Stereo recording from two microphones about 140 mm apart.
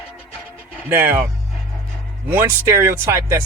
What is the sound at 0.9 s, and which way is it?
Speech, 15° right (ahead or behind).